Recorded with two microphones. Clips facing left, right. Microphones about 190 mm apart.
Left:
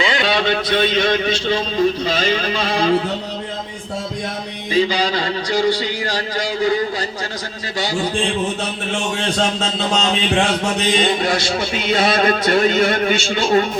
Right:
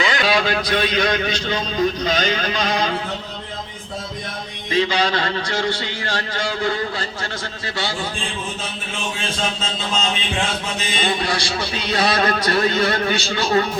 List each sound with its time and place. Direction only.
0.0 s a sound: 25° left (ahead or behind)
0.3 s a man's voice: centre (ahead or behind)
5.0 s speech: 10° left (ahead or behind)
9.6 s mantra: 75° left (ahead or behind)
11.9 s a man's voice: 25° left (ahead or behind)